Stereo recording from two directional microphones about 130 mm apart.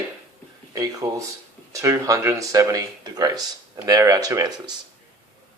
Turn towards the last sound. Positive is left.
turn(degrees=-30)  # may be behind; listen again after turning